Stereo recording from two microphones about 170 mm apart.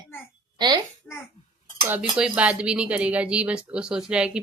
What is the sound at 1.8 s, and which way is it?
Speech, 10° right (ahead or behind).